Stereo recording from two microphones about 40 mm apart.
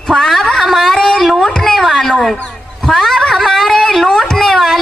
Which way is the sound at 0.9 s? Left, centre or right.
Centre.